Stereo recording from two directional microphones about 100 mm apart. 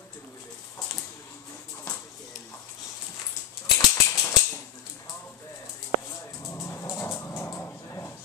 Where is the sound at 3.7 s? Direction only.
35° left (ahead or behind).